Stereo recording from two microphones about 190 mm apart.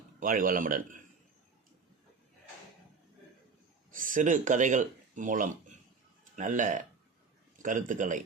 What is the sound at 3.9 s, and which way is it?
Speech, 45° right (ahead or behind).